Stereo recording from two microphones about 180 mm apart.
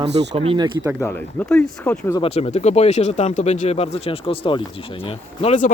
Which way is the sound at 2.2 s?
35° left (ahead or behind).